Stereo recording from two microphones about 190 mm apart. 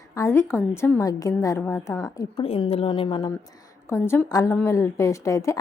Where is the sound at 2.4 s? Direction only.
30° left (ahead or behind).